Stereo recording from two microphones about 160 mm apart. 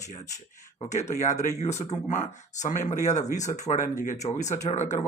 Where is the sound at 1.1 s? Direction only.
45° left (ahead or behind).